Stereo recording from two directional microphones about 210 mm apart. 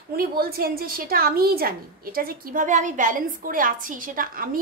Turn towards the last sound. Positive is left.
turn(degrees=-40)  # may be behind; listen again after turning